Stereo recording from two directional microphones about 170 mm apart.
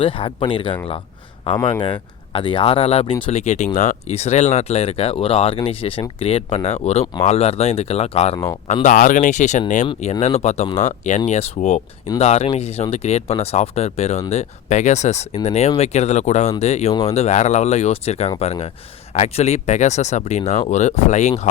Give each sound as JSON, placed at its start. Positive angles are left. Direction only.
{"t": 0.0, "sound": "speech", "side_deg": 30}
{"t": 1.8, "sound": "speech", "side_deg": 30}